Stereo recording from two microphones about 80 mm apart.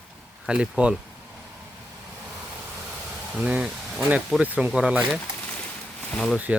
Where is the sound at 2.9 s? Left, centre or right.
Centre.